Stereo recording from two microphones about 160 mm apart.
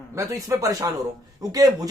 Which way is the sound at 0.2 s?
20° right (ahead or behind).